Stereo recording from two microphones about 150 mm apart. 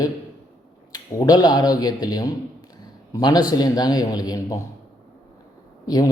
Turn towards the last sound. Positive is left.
turn(degrees=25)  # may be behind; listen again after turning